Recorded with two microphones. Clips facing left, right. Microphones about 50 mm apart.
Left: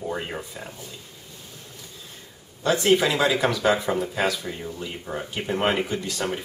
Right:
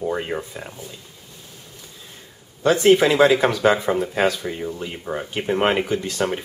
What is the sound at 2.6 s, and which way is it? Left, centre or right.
Speech, right.